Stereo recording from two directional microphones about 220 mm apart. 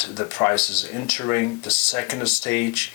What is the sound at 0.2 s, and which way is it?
Speech, 10° left (ahead or behind).